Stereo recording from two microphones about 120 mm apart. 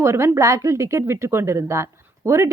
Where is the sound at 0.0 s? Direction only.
25° right (ahead or behind).